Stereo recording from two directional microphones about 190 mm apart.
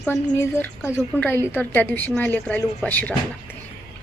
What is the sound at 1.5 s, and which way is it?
Speech, 10° left (ahead or behind).